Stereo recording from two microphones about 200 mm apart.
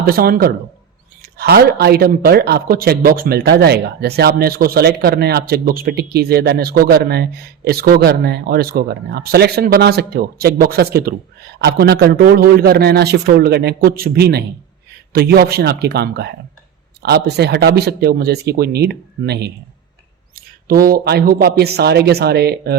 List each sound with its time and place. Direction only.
0.0 s speech: 50° right (ahead or behind)